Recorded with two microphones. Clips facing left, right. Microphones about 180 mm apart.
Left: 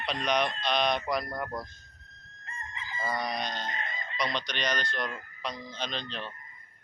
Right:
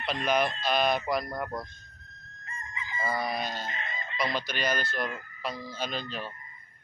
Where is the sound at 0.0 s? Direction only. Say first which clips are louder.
Right 2 dB; 5° right (ahead or behind).